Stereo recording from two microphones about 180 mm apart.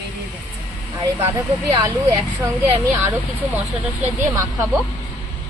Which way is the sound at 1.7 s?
20° right (ahead or behind).